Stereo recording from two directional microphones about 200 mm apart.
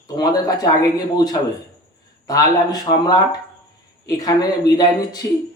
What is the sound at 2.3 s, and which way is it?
A man's voice, 20° left (ahead or behind).